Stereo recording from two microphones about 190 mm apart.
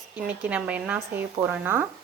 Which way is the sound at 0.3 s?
5° right (ahead or behind).